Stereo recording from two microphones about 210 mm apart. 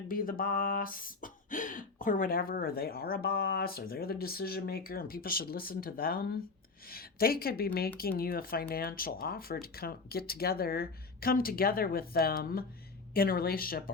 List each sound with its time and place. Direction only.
0.1 s speech: 45° left (ahead or behind)